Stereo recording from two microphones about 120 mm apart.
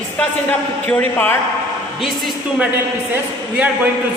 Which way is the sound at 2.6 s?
15° right (ahead or behind).